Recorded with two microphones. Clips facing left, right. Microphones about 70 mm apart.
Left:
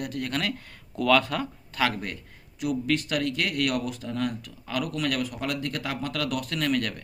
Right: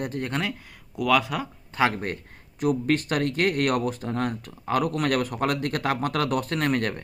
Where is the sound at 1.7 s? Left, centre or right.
Right.